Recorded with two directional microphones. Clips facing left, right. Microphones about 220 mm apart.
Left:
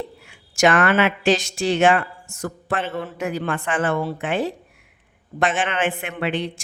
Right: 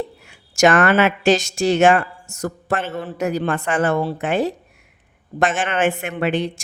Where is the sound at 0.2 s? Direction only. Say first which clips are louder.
Right 3 dB; 40° right (ahead or behind).